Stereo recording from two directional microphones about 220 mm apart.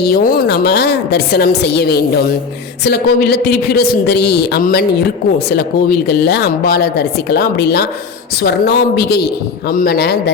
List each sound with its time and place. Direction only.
0.0 s speech: 40° left (ahead or behind)